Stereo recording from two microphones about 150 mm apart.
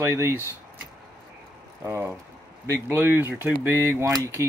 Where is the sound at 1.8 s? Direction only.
15° right (ahead or behind).